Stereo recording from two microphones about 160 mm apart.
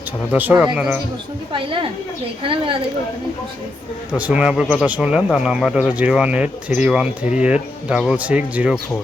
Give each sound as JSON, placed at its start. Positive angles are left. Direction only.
{"t": 0.3, "sound": "speech", "side_deg": -10}
{"t": 1.5, "sound": "speech", "side_deg": -35}
{"t": 4.2, "sound": "speech", "side_deg": -10}